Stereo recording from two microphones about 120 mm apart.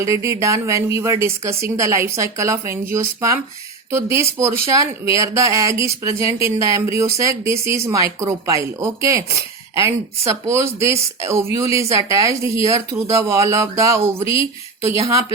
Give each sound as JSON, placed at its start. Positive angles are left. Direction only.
{"t": 0.0, "sound": "a woman's voice", "side_deg": -25}